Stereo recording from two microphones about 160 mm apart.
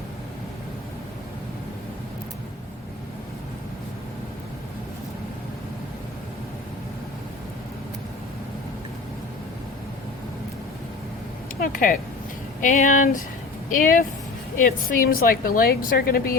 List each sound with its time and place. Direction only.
11.6 s a woman's voice: 60° left (ahead or behind)